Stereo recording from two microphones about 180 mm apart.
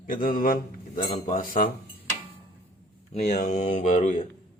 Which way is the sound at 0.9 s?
35° left (ahead or behind).